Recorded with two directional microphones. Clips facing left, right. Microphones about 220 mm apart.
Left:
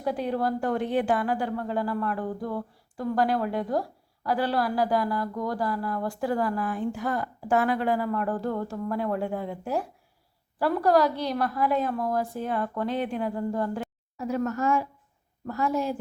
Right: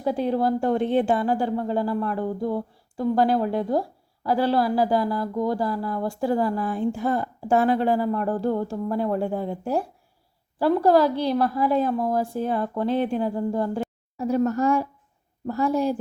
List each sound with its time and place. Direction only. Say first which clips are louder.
0.0 s speech: right 4 dB; 30° right (ahead or behind)